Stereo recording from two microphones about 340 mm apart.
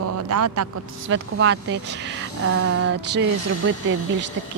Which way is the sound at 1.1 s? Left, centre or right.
Right.